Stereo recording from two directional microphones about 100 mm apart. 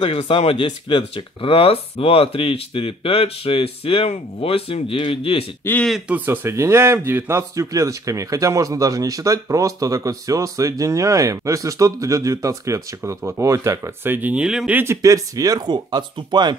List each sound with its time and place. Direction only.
0.1 s speech: 85° left; by 5.4 s 65° left (ahead or behind)
5.6 s speech: 20° left (ahead or behind)
6.0 s a man's voice: 15° right (ahead or behind)
14.4 s speech: 5° right (ahead or behind)
14.7 s speech: 20° right (ahead or behind)
15.0 s speech: 35° right (ahead or behind)